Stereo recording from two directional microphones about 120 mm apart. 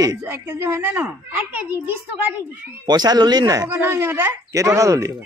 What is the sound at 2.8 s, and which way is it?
Speech, 35° right (ahead or behind).